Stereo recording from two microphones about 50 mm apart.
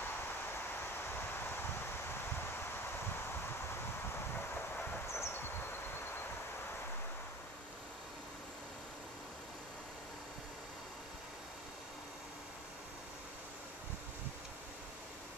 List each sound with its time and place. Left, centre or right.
1.1 s rustling leaves: left
4.1 s vehicle: left
5.0 s a sound: left